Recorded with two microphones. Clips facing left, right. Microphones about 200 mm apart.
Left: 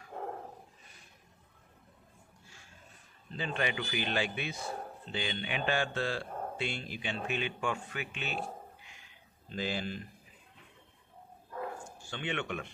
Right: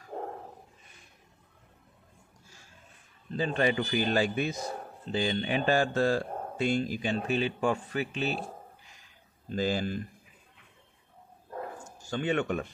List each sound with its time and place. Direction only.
0.1 s dog: 35° right (ahead or behind)
3.3 s a man's voice: 40° right (ahead or behind)
11.8 s a man's voice: 40° right (ahead or behind)